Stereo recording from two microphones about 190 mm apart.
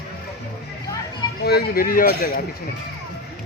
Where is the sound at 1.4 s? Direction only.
55° left (ahead or behind).